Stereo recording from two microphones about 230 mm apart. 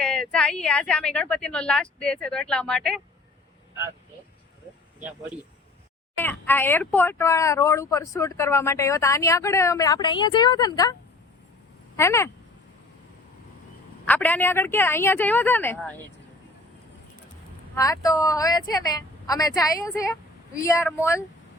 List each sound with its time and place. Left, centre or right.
0.0 s a woman's voice: centre
4.9 s speech: centre
6.1 s speech: centre
11.9 s speech: centre
14.0 s speech: centre
17.7 s speech: centre